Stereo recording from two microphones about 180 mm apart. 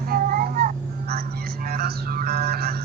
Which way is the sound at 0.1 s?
55° right (ahead or behind).